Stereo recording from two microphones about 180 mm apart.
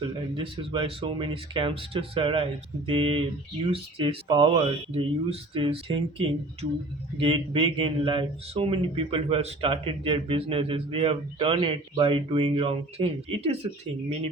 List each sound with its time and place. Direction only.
0.0 s speech: 30° right (ahead or behind)